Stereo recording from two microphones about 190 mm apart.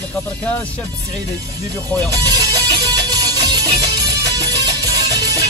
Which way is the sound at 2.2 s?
20° right (ahead or behind).